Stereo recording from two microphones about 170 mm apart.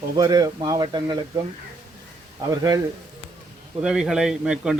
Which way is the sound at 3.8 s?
5° right (ahead or behind).